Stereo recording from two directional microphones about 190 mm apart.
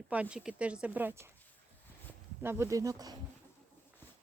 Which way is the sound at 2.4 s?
15° right (ahead or behind).